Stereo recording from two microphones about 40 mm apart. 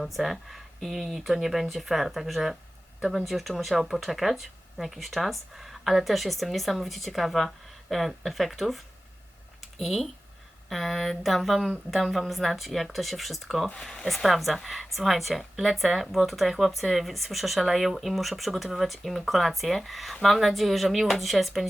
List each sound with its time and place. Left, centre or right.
0.0 s a woman's voice: centre